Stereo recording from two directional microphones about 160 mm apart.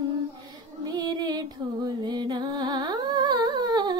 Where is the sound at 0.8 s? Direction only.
25° right (ahead or behind).